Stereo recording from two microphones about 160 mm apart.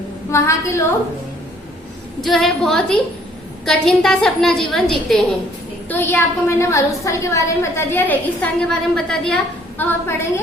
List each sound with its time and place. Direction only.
0.3 s a woman's voice: 15° left (ahead or behind)
2.2 s a woman's voice: centre (ahead or behind)
5.9 s a woman's voice: 15° left (ahead or behind)